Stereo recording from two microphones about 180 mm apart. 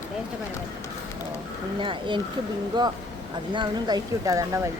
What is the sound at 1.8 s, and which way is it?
Speech, 25° right (ahead or behind).